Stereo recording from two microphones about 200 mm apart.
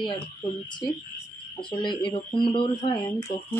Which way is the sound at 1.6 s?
25° left (ahead or behind).